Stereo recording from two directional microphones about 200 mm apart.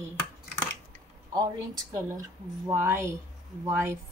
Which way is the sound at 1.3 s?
15° right (ahead or behind).